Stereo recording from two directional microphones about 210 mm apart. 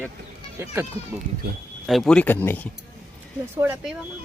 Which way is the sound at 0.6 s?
10° right (ahead or behind).